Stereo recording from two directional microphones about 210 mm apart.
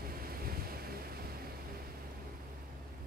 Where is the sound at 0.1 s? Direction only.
45° right (ahead or behind).